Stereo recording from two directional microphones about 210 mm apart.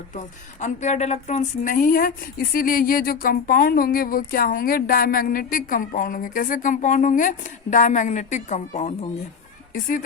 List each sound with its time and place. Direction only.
0.1 s a woman's voice: 35° left (ahead or behind)